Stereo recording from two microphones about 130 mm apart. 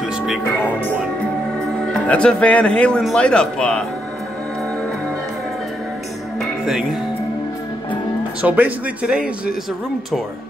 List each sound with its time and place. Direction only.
0.4 s speech: 15° left (ahead or behind)
1.9 s speech: 5° left (ahead or behind)
6.4 s music: 5° right (ahead or behind)
8.4 s speech: 10° right (ahead or behind)